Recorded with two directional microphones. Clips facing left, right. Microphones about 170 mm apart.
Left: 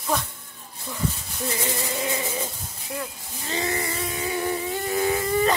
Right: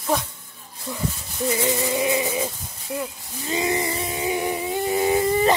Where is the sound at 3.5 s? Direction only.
15° right (ahead or behind).